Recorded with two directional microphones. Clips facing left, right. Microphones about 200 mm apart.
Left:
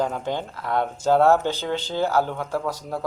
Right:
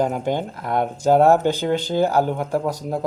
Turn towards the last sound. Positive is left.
turn(degrees=-15)  # may be behind; listen again after turning